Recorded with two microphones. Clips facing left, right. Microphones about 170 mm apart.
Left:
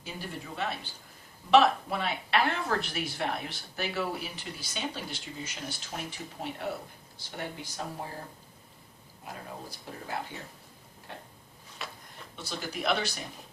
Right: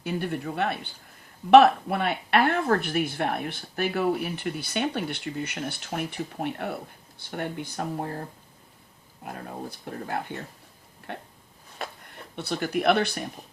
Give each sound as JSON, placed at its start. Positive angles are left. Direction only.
{"t": 0.0, "sound": "speech", "side_deg": -60}
{"t": 9.2, "sound": "speech", "side_deg": -55}
{"t": 11.8, "sound": "a sound", "side_deg": -50}
{"t": 12.4, "sound": "speech", "side_deg": -60}